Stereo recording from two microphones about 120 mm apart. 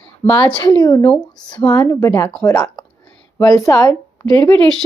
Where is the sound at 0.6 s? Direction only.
35° left (ahead or behind).